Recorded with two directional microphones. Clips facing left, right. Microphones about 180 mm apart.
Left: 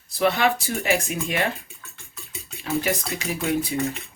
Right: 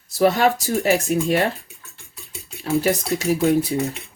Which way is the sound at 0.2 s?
40° right (ahead or behind).